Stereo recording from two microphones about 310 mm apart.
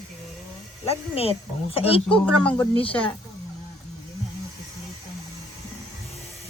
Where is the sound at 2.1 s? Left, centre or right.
Centre.